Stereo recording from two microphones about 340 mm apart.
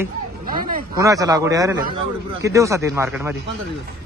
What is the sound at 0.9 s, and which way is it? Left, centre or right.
Speech, centre.